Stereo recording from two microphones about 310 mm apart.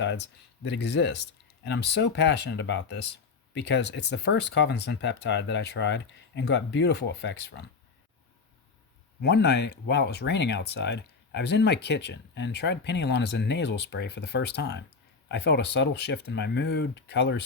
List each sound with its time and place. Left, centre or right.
0.0 s speech: left
9.2 s speech: left